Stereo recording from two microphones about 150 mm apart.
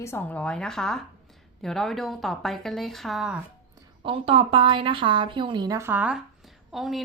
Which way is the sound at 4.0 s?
35° right (ahead or behind).